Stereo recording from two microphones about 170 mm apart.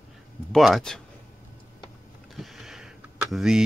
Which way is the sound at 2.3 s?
Centre (ahead or behind).